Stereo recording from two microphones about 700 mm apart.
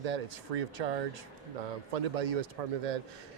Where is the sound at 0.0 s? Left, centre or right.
Right.